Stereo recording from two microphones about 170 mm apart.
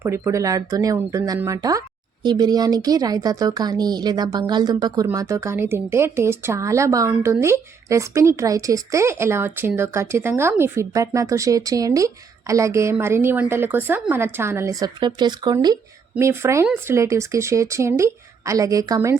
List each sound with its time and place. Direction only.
0.0 s speech: 15° right (ahead or behind)